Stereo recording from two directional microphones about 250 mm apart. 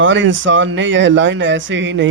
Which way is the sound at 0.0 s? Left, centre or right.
Right.